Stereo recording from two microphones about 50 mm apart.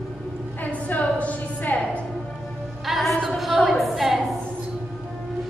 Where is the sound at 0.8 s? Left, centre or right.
Left.